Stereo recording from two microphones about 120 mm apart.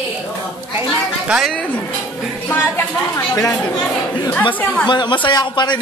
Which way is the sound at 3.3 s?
30° left (ahead or behind).